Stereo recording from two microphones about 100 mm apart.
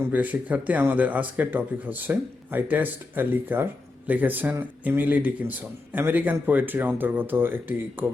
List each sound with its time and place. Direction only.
0.0 s speech: 15° right (ahead or behind)